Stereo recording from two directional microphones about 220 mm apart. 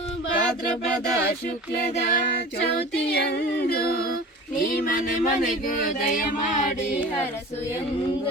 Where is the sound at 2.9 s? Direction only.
50° left (ahead or behind).